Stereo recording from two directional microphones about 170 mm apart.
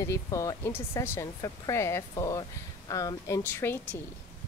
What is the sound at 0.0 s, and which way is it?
A woman's voice, 20° left (ahead or behind).